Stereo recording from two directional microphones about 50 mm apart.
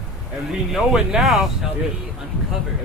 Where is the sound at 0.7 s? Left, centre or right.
Centre.